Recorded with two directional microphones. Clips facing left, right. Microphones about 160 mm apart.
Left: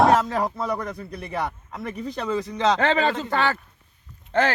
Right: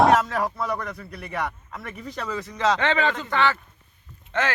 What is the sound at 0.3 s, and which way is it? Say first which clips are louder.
A man's voice: left 1 dB; 25° left (ahead or behind).